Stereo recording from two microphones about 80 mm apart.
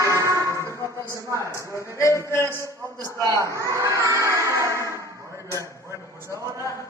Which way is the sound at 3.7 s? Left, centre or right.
Right.